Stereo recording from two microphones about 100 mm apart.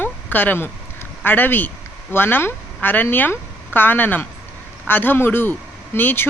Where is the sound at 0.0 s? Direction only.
20° left (ahead or behind).